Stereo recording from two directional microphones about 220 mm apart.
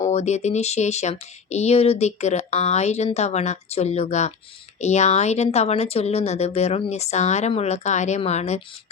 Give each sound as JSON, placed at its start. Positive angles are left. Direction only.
{"t": 0.0, "sound": "speech", "side_deg": 30}